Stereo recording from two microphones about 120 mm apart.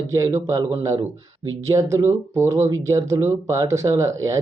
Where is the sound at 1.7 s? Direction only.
25° right (ahead or behind).